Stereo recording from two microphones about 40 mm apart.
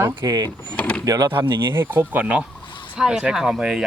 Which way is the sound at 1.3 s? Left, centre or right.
Right.